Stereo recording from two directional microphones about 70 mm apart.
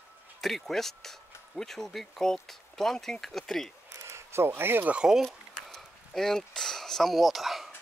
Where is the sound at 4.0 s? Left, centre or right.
Right.